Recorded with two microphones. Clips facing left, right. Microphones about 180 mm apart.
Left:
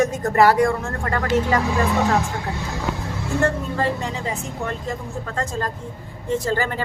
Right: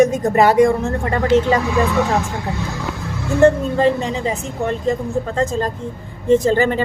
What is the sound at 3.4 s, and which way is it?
Speech, 20° right (ahead or behind).